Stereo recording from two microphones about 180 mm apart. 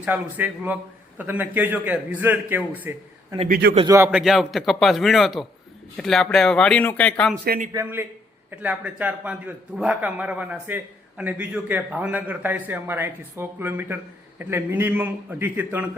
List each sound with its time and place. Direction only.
0.0 s a man's voice: 10° right (ahead or behind)
3.5 s a man's voice: 60° right (ahead or behind)
3.8 s a man's voice: 15° right (ahead or behind)
4.1 s speech: centre (ahead or behind)
7.4 s a man's voice: 55° right (ahead or behind)
7.7 s a man's voice: 15° right (ahead or behind)